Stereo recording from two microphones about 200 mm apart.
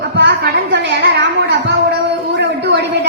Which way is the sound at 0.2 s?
60° right (ahead or behind).